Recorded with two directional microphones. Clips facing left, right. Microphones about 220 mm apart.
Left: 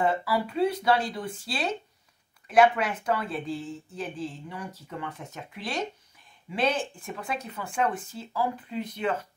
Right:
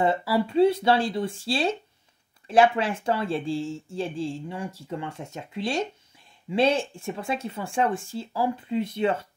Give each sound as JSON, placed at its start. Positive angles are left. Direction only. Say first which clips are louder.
{"t": 0.0, "sound": "speech", "louder": "right 3 dB", "side_deg": -25}